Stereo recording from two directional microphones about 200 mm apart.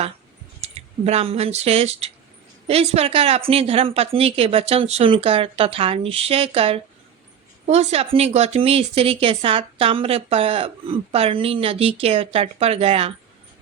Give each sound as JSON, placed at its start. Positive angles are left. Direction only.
{"t": 0.6, "sound": "speech", "side_deg": -30}